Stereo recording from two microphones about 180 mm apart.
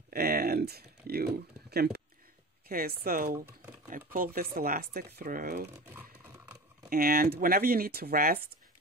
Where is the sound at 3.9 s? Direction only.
55° right (ahead or behind).